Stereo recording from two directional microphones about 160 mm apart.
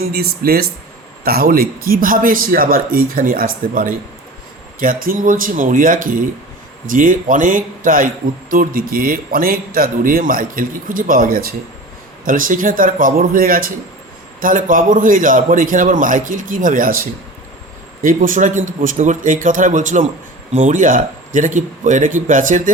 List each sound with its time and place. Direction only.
0.1 s a man's voice: 75° right (ahead or behind); by 22.7 s 55° right (ahead or behind)